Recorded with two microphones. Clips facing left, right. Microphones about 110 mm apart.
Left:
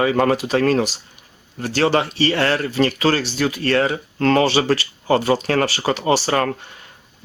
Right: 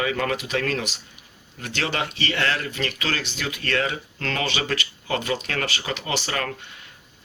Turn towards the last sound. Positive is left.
turn(degrees=40)  # may be behind; listen again after turning